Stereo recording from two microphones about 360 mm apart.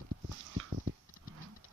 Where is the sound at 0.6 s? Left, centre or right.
Right.